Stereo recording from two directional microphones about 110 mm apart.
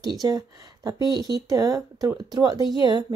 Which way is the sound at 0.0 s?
35° right (ahead or behind).